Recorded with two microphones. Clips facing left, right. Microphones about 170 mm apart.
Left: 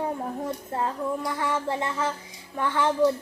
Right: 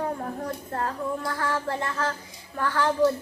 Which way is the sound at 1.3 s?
20° left (ahead or behind).